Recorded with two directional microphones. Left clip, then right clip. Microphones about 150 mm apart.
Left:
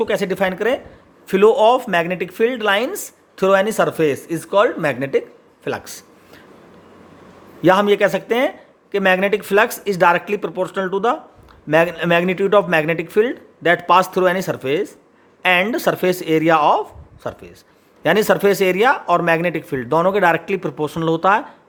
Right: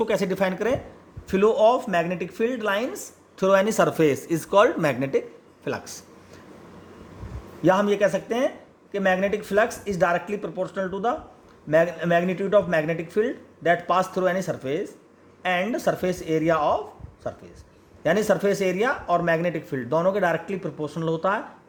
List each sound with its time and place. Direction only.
0.0 s speech: 15° left (ahead or behind)
1.3 s speech: 35° left (ahead or behind)
7.6 s speech: 35° left (ahead or behind)